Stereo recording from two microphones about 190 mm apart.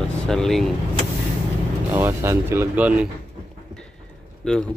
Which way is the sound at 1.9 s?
10° right (ahead or behind).